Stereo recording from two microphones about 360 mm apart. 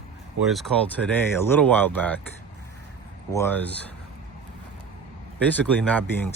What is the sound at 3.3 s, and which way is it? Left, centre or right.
Speech, centre.